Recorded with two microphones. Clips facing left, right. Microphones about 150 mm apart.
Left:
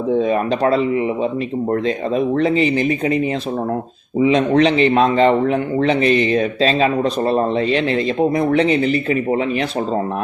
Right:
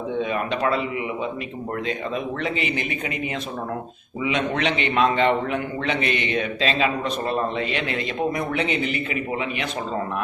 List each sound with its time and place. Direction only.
0.1 s a man's voice: 35° left (ahead or behind)